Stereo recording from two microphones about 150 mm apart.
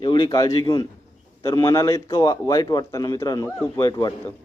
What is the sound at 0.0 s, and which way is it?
Speech, 30° left (ahead or behind).